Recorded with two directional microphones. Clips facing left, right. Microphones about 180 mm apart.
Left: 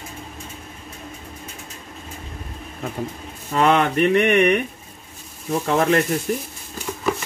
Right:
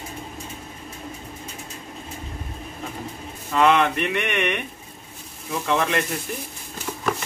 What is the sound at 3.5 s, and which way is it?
Speech, 40° left (ahead or behind).